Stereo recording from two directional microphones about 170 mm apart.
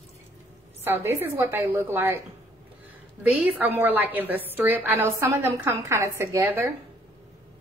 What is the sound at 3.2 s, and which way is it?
A woman's voice, 10° right (ahead or behind).